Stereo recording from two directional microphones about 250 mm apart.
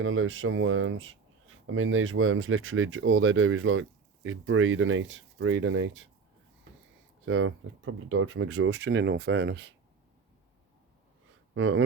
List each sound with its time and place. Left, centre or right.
0.0 s speech: right
7.3 s speech: right
11.5 s speech: right